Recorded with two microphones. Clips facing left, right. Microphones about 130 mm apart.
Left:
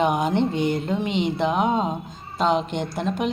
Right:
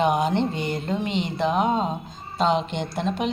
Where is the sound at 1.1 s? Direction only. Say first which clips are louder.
Left 3 dB; 60° left (ahead or behind).